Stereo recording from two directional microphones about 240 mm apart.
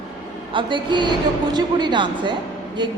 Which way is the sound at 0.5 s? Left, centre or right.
Centre.